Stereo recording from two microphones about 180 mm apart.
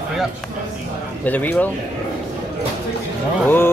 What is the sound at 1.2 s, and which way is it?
Speech, 10° left (ahead or behind).